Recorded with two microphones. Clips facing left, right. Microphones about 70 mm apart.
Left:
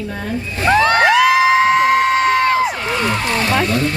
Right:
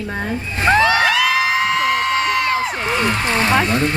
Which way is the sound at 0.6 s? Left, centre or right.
Right.